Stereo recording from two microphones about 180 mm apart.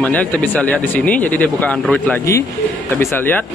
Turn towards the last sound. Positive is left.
turn(degrees=10)  # may be behind; listen again after turning